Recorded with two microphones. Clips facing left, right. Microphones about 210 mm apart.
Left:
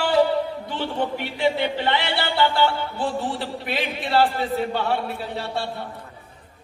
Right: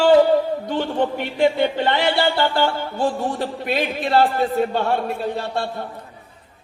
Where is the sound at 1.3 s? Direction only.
45° right (ahead or behind).